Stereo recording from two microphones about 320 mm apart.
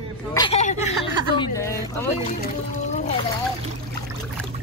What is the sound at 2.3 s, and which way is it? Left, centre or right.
Speech, left.